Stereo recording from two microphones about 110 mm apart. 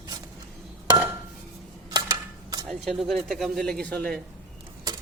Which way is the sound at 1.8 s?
35° right (ahead or behind).